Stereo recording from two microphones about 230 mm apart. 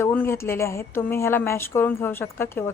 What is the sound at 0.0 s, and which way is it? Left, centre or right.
A woman's voice, centre.